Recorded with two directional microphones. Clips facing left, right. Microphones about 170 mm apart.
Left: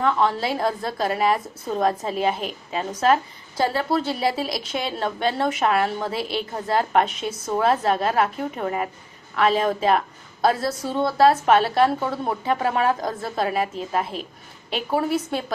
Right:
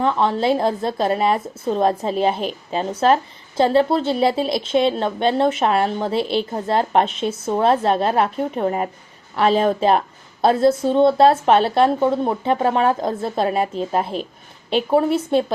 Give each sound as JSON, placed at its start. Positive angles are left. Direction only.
{"t": 0.0, "sound": "a woman's voice", "side_deg": -25}